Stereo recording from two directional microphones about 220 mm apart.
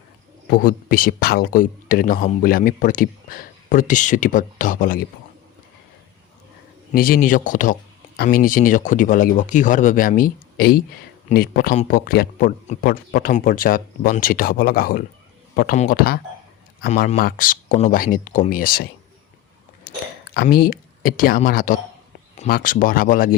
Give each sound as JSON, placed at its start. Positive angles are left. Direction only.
{"t": 0.5, "sound": "speech", "side_deg": 40}
{"t": 6.9, "sound": "speech", "side_deg": 40}
{"t": 19.9, "sound": "chewing", "side_deg": 45}
{"t": 20.3, "sound": "speech", "side_deg": 45}